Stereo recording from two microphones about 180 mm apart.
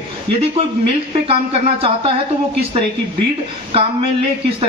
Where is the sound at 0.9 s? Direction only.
35° right (ahead or behind).